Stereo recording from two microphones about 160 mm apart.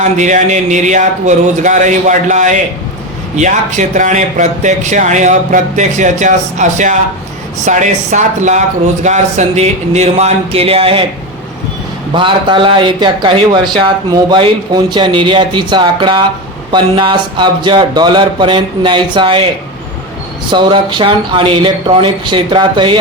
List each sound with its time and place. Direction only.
0.0 s a man's voice: 50° right (ahead or behind)
12.1 s a man's voice: 30° right (ahead or behind)
20.5 s a man's voice: 30° right (ahead or behind)